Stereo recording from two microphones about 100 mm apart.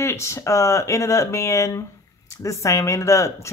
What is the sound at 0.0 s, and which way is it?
Speech, 25° left (ahead or behind).